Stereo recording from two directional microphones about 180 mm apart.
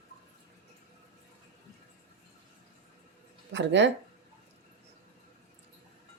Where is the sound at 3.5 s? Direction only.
80° right.